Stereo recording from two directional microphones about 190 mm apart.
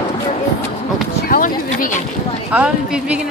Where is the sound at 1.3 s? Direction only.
45° left (ahead or behind).